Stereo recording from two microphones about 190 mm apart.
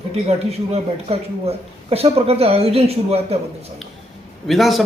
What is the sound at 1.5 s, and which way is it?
A man's voice, 30° right (ahead or behind).